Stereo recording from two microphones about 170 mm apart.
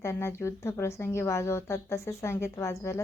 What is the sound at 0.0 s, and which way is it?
A woman's voice, 15° left (ahead or behind).